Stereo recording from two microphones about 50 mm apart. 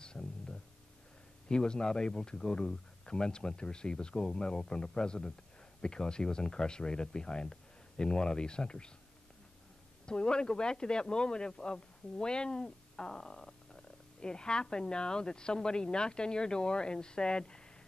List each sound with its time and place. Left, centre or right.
0.0 s a sound: centre
1.5 s speech: centre
10.0 s speech: centre